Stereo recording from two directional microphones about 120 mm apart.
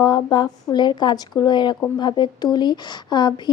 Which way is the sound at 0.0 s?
35° left (ahead or behind).